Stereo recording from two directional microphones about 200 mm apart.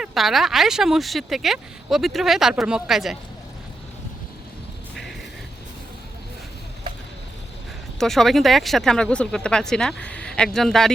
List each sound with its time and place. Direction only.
0.0 s speech: centre (ahead or behind)
7.9 s speech: centre (ahead or behind)